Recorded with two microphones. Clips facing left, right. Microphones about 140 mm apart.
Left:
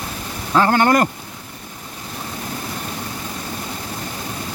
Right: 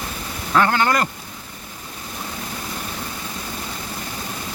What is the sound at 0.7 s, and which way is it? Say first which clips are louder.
Speech: left 5 dB; 45° left (ahead or behind).